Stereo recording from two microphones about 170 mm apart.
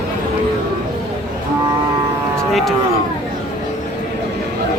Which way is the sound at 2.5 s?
Centre (ahead or behind).